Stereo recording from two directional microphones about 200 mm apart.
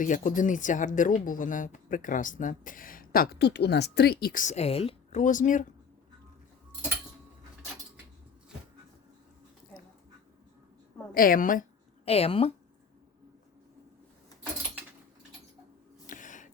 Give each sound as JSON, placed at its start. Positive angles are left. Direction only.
{"t": 0.0, "sound": "speech", "side_deg": 40}
{"t": 11.1, "sound": "a woman's voice", "side_deg": 45}
{"t": 12.0, "sound": "speech", "side_deg": 30}
{"t": 16.0, "sound": "a sound", "side_deg": 40}